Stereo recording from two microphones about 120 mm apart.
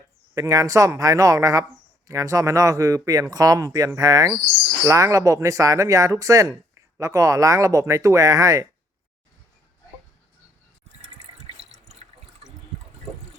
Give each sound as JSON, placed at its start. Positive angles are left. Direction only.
{"t": 0.3, "sound": "speech", "side_deg": -30}